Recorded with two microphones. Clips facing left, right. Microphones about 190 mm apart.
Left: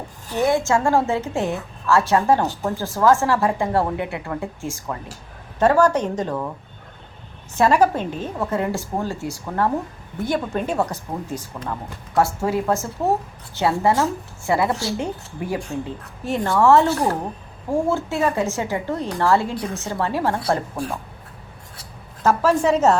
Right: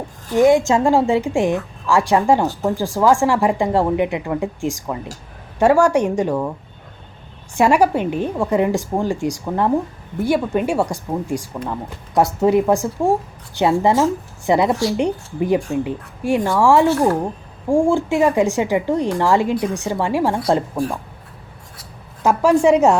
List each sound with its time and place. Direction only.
0.3 s a woman's voice: 15° right (ahead or behind)
7.5 s a woman's voice: 10° right (ahead or behind)
22.2 s a woman's voice: 15° right (ahead or behind)